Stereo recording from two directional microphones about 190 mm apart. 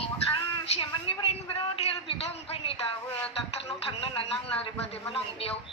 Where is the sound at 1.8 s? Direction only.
30° left (ahead or behind).